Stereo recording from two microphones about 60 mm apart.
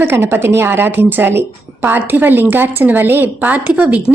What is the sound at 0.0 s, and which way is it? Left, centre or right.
A woman's voice, right.